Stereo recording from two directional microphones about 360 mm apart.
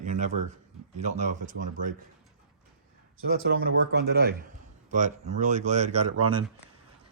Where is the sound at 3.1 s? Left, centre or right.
Right.